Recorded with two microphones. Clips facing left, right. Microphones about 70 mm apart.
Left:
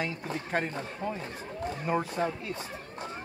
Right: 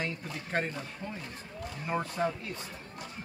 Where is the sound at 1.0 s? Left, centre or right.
Left.